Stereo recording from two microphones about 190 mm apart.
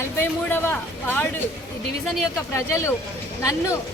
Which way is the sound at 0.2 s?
10° left (ahead or behind).